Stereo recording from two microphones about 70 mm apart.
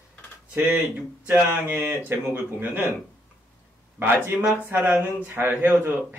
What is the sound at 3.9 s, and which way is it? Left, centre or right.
A man's voice, right.